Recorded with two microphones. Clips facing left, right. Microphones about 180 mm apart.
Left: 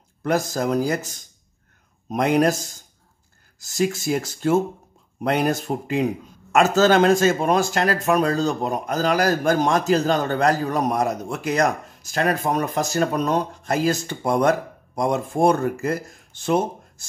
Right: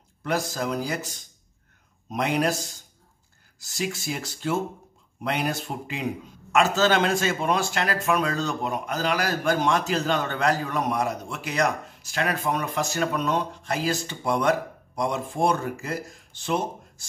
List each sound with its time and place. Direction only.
0.2 s speech: 45° left (ahead or behind)